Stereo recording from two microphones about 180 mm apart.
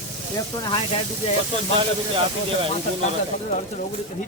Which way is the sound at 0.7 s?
35° left (ahead or behind).